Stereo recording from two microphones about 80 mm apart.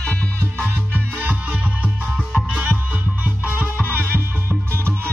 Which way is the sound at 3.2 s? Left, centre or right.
Right.